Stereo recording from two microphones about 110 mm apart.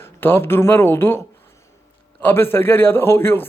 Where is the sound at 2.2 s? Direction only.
20° left (ahead or behind).